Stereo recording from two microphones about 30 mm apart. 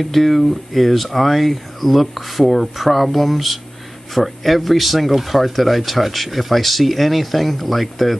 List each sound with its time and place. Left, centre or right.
0.0 s speech: centre